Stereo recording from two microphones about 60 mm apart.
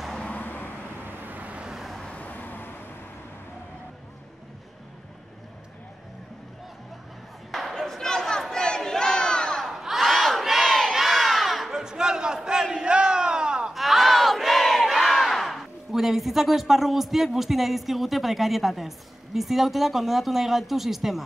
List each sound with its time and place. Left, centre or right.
0.2 s vehicle: left
1.0 s vehicle: right
1.7 s vehicle: centre
2.0 s vehicle: left
7.5 s crowd: centre
9.7 s crowd: centre
12.4 s battle cry: centre
13.7 s battle cry: centre